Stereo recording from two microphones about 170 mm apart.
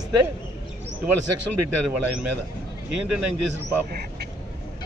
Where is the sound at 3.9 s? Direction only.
70° right (ahead or behind).